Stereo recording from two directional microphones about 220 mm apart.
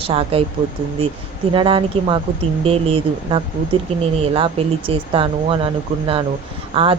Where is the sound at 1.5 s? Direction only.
20° right (ahead or behind).